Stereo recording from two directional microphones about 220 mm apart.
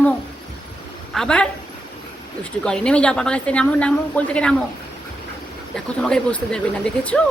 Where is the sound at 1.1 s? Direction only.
5° left (ahead or behind).